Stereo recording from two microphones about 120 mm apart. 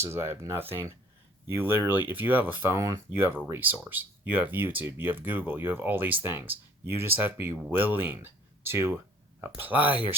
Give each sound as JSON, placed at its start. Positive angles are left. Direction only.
{"t": 0.0, "sound": "speech", "side_deg": -20}